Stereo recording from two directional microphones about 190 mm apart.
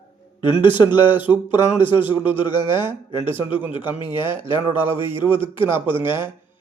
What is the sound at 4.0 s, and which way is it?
Speech, 25° left (ahead or behind).